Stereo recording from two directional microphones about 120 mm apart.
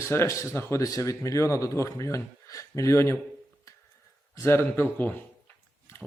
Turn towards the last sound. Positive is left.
turn(degrees=15)  # may be behind; listen again after turning